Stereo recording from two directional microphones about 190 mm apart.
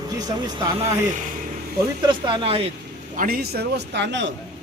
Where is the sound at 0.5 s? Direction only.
25° right (ahead or behind).